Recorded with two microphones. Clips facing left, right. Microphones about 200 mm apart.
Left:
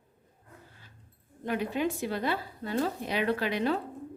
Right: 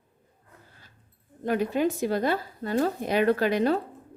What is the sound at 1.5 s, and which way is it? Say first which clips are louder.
Speech: right 5 dB; 40° right (ahead or behind).